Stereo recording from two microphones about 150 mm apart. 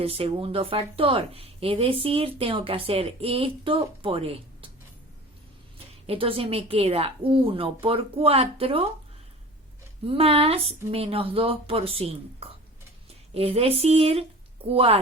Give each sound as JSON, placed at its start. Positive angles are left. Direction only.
{"t": 0.0, "sound": "speech", "side_deg": -40}
{"t": 6.1, "sound": "speech", "side_deg": -40}
{"t": 10.1, "sound": "speech", "side_deg": -40}